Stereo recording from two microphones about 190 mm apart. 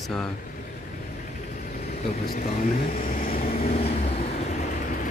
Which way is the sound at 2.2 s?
45° left (ahead or behind).